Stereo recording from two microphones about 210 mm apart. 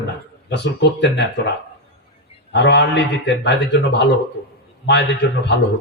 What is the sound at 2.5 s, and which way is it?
A man's voice, 55° left (ahead or behind).